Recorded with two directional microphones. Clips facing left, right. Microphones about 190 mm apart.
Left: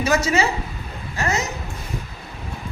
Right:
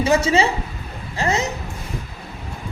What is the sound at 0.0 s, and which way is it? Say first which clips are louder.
A man's voice: right 3 dB; 30° right (ahead or behind).